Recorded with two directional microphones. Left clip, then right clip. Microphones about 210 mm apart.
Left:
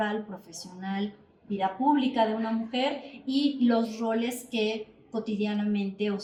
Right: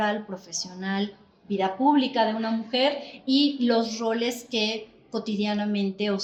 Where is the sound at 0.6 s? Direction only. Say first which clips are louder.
Right 4 dB; 45° right (ahead or behind).